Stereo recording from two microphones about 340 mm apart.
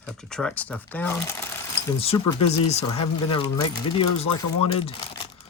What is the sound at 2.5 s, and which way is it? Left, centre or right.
Speech, centre.